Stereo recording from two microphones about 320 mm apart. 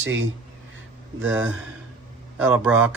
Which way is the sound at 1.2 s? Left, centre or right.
Centre.